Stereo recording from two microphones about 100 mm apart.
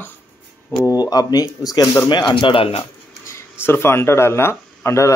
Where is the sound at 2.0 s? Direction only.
50° left (ahead or behind); by 2.8 s 65° left (ahead or behind).